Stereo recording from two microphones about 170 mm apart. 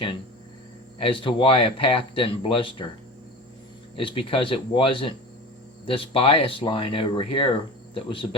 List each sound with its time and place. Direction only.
0.9 s speech: 30° left (ahead or behind)
3.9 s speech: 30° left (ahead or behind)